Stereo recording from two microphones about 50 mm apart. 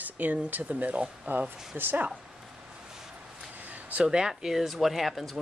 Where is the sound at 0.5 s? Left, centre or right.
Right.